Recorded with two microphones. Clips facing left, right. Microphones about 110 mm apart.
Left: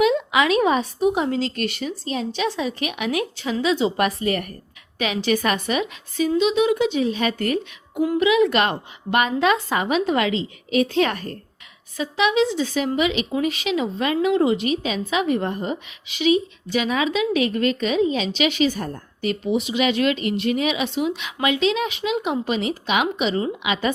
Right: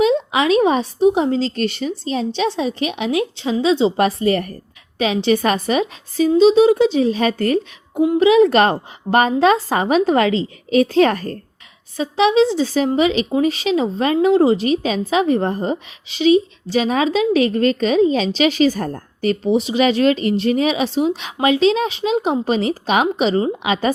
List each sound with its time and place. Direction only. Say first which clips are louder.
0.0 s a woman's voice: right 2 dB; 30° right (ahead or behind)